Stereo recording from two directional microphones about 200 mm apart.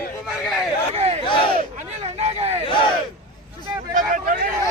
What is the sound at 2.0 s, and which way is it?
Hubbub, 30° right (ahead or behind).